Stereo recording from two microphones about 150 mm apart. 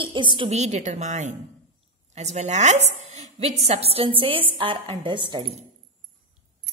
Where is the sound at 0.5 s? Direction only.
50° right (ahead or behind); by 5.5 s 35° right (ahead or behind).